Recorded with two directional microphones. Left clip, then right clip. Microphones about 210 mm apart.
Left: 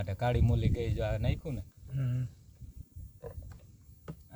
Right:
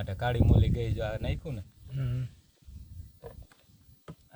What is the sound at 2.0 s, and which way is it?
Speech, 50° right (ahead or behind).